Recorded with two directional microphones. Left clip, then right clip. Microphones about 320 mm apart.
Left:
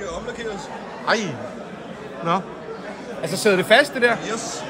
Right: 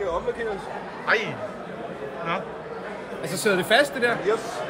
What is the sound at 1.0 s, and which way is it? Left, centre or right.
Speech, centre.